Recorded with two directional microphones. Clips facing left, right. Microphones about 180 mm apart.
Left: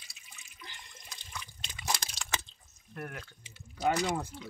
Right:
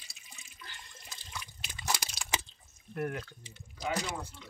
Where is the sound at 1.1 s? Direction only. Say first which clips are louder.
Even; 5° right (ahead or behind).